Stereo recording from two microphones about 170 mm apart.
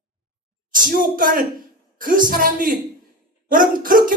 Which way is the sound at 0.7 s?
55° right (ahead or behind).